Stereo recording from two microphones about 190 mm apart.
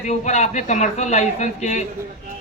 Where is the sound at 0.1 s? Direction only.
35° left (ahead or behind).